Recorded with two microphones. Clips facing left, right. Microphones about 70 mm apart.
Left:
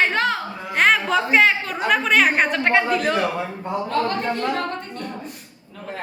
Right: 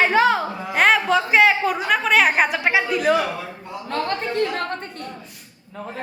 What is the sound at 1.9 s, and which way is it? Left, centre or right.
A woman's voice, centre.